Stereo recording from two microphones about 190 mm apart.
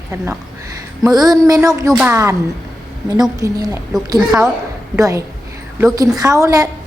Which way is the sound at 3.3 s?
15° right (ahead or behind).